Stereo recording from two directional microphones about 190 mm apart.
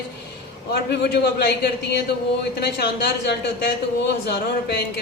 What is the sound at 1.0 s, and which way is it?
A man's voice, 60° left (ahead or behind).